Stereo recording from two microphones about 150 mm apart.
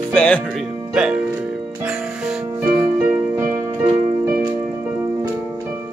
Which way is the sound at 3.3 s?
15° right (ahead or behind).